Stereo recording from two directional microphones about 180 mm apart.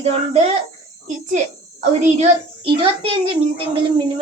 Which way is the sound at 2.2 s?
30° right (ahead or behind).